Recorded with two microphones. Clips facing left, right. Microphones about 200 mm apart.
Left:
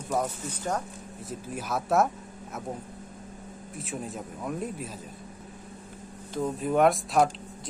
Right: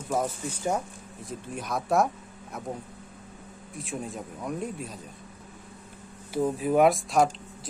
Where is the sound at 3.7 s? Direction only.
Centre (ahead or behind).